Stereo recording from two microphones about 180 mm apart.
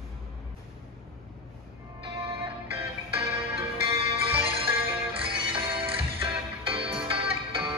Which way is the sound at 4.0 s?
30° right (ahead or behind).